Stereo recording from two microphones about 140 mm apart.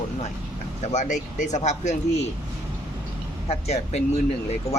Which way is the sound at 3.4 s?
50° left (ahead or behind).